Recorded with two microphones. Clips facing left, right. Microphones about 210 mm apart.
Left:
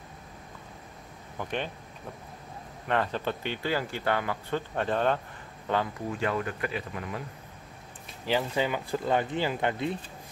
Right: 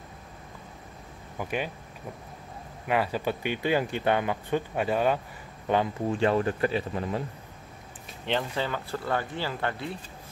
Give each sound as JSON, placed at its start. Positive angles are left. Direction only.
{"t": 1.4, "sound": "speech", "side_deg": -10}
{"t": 2.9, "sound": "speech", "side_deg": -10}
{"t": 6.0, "sound": "speech", "side_deg": -30}
{"t": 8.3, "sound": "speech", "side_deg": 10}